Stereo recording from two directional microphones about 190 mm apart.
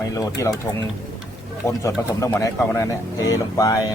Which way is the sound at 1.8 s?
15° left (ahead or behind).